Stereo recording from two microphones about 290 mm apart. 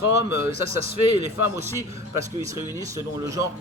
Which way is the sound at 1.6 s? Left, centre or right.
Centre.